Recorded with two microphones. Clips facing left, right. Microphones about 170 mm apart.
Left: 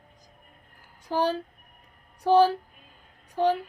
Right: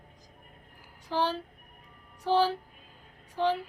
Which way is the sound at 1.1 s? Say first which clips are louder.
Left 4 dB; 45° left (ahead or behind).